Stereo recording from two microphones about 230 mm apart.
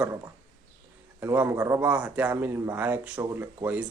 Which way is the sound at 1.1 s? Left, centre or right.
Centre.